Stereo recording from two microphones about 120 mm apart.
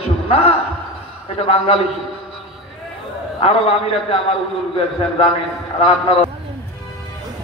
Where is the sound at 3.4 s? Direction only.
55° left (ahead or behind).